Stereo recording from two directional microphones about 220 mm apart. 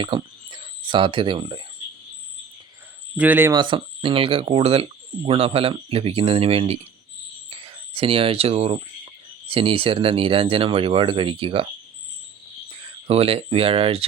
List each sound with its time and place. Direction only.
0.0 s speech: 20° right (ahead or behind)
3.2 s speech: 10° right (ahead or behind); by 11.7 s 25° right (ahead or behind)
12.8 s speech: 25° right (ahead or behind)